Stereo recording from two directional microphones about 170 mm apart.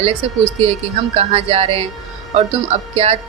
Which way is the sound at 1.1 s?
35° right (ahead or behind).